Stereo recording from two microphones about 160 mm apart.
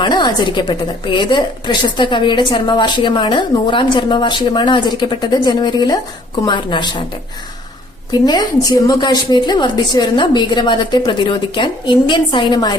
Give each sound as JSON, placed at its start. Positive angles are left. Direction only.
{"t": 0.0, "sound": "a woman's voice", "side_deg": 25}
{"t": 8.6, "sound": "a woman's voice", "side_deg": 25}